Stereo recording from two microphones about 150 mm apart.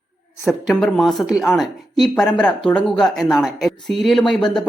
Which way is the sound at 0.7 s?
5° left (ahead or behind).